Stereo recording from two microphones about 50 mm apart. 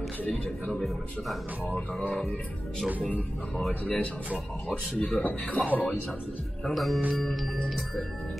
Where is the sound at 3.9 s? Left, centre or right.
Left.